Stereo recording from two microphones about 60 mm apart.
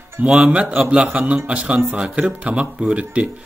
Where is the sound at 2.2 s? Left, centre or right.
Right.